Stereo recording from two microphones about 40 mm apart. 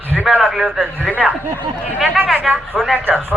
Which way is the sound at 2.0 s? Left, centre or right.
Centre.